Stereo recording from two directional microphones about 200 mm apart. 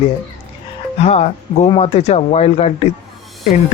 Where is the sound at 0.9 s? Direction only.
30° left (ahead or behind).